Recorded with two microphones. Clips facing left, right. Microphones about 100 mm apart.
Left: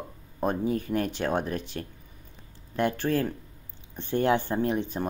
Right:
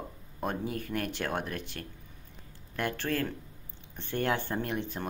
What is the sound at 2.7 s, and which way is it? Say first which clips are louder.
Speech: left 6 dB; 20° left (ahead or behind).